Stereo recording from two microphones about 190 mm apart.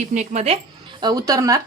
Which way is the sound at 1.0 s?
20° right (ahead or behind).